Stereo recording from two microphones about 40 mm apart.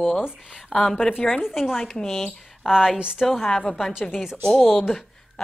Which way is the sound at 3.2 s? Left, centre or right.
Centre.